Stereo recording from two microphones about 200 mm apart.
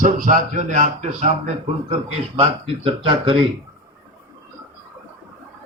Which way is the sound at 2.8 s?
25° right (ahead or behind).